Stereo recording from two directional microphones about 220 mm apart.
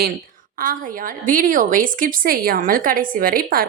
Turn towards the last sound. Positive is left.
turn(degrees=-40)  # may be behind; listen again after turning